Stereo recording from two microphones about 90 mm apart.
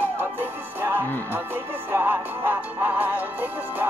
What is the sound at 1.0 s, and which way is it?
Speech, 20° left (ahead or behind).